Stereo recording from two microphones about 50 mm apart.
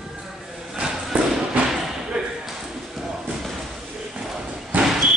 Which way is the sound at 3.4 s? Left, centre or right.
Centre.